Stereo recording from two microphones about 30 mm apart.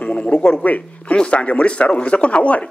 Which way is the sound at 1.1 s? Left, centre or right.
Left.